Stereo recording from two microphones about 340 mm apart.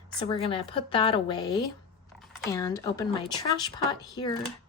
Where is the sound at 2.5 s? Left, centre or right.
Centre.